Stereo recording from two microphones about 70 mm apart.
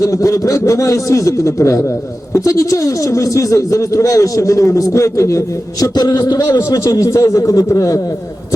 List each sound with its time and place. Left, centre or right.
0.0 s speech: left
5.8 s a man's voice: left
6.6 s speech: left